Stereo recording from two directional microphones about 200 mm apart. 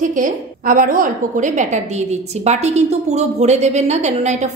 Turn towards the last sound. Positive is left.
turn(degrees=-35)  # may be behind; listen again after turning